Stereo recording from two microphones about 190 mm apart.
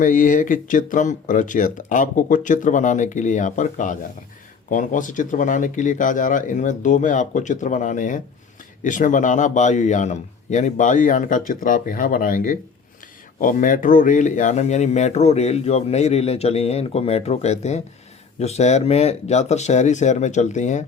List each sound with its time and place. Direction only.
0.0 s speech: 45° left (ahead or behind)